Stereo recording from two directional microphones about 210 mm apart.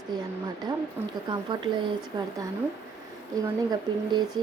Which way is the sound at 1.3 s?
20° right (ahead or behind).